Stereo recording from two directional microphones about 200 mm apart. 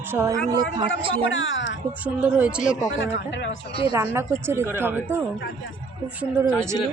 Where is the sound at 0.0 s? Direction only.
10° right (ahead or behind).